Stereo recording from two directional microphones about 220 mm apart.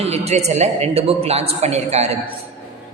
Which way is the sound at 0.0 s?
30° right (ahead or behind).